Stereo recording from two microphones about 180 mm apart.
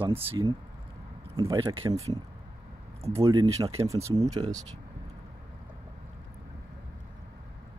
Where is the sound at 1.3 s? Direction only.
25° right (ahead or behind).